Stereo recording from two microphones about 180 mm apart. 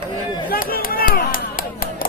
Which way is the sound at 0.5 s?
50° left (ahead or behind).